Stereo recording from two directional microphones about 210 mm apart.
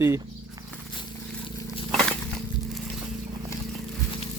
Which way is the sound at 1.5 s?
25° left (ahead or behind).